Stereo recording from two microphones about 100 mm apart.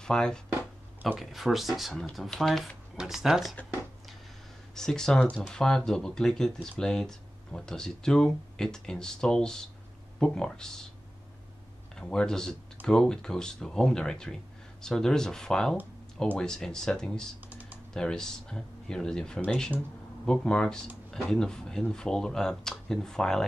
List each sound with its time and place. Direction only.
0.0 s speech: 5° left (ahead or behind)
4.7 s speech: 5° left (ahead or behind)
12.0 s speech: 5° left (ahead or behind)
17.5 s typing: 15° right (ahead or behind)
17.9 s speech: 5° left (ahead or behind)